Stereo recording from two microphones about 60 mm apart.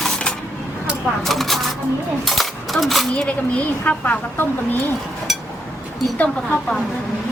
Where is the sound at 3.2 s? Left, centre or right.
Left.